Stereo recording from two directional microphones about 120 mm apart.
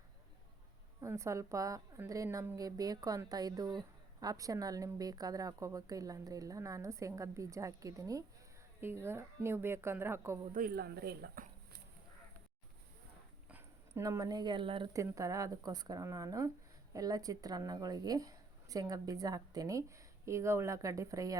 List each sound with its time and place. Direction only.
1.0 s a woman's voice: 25° right (ahead or behind)
13.5 s a sound: 15° right (ahead or behind)
14.0 s speech: 30° right (ahead or behind); by 14.8 s 45° right (ahead or behind)
14.9 s a woman's voice: 25° right (ahead or behind)